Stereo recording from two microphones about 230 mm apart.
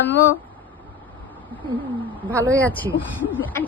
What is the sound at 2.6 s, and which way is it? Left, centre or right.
Speech, centre.